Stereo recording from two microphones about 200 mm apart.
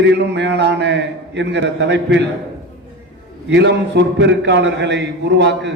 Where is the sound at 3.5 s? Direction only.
60° right (ahead or behind).